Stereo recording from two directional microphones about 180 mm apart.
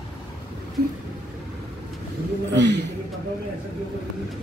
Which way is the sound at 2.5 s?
75° right (ahead or behind).